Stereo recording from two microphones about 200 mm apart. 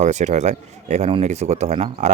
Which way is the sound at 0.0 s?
35° right (ahead or behind).